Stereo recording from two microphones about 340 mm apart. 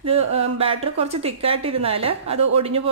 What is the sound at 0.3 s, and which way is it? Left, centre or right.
A woman's voice, centre.